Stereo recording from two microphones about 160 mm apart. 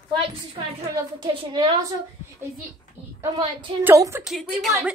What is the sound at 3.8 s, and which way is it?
Speech, 15° right (ahead or behind).